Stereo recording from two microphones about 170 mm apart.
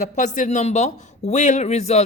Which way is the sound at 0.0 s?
45° left (ahead or behind).